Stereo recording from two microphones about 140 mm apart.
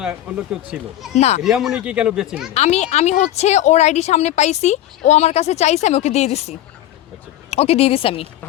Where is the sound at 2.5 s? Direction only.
50° left (ahead or behind).